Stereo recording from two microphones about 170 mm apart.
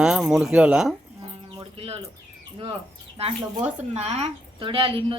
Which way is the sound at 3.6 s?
40° right (ahead or behind).